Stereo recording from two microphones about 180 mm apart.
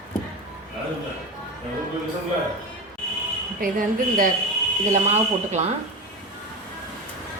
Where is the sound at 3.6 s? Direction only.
50° right (ahead or behind).